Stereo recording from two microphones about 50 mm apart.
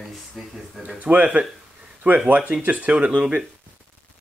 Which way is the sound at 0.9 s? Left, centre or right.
Right.